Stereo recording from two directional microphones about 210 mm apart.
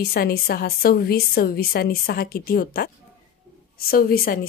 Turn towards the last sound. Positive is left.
turn(degrees=45)  # may be behind; listen again after turning